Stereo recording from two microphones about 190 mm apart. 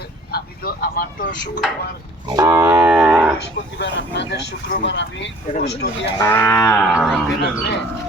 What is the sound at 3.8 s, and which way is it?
Speech, 65° left (ahead or behind).